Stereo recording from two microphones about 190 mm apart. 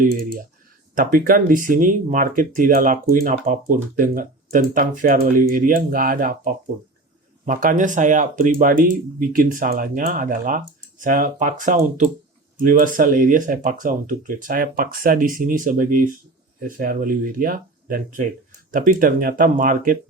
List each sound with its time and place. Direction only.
0.0 s speech: 50° right (ahead or behind)